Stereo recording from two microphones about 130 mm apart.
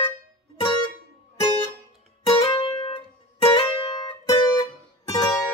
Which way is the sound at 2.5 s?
40° left (ahead or behind).